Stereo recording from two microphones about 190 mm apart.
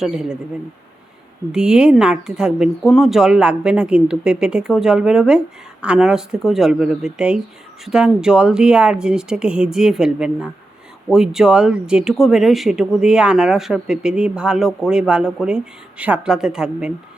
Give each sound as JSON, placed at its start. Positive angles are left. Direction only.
{"t": 0.0, "sound": "speech", "side_deg": -5}
{"t": 1.5, "sound": "speech", "side_deg": -5}